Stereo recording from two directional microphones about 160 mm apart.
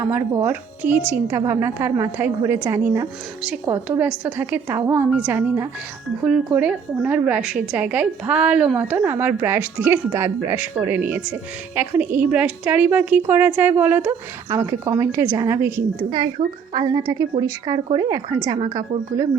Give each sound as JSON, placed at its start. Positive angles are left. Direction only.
{"t": 0.0, "sound": "a woman's voice", "side_deg": -15}